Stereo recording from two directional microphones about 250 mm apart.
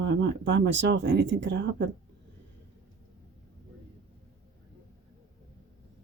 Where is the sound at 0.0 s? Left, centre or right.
Right.